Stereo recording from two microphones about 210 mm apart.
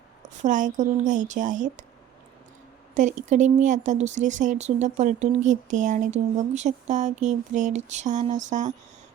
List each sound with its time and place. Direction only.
0.4 s speech: 35° right (ahead or behind)
2.9 s speech: 35° right (ahead or behind)